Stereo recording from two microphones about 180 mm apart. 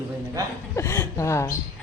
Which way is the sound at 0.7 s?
15° left (ahead or behind).